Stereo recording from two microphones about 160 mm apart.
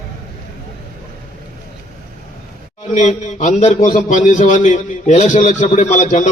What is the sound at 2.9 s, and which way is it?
A man's voice, 45° left (ahead or behind).